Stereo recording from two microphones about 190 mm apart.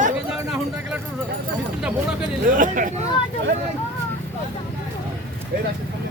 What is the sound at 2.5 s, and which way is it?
Speech, 45° right (ahead or behind).